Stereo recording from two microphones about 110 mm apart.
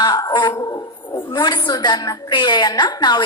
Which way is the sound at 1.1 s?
45° left (ahead or behind).